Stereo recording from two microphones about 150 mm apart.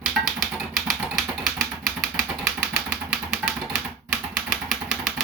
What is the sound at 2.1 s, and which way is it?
Vehicle, 15° right (ahead or behind).